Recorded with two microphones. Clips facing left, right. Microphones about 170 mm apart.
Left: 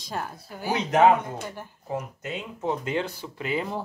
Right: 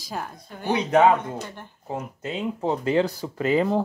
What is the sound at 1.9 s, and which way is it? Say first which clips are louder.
Speech: right 1 dB; 30° right (ahead or behind).